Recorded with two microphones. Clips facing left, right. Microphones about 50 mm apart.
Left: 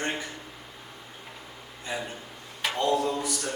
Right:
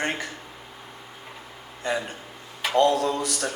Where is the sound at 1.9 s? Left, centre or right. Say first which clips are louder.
Right 6 dB; right.